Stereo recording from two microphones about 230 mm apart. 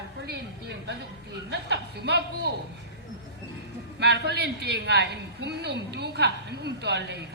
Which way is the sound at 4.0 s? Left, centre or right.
Right.